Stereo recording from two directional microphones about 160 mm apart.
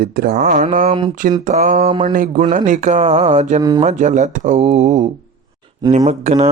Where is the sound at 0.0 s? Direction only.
70° right (ahead or behind).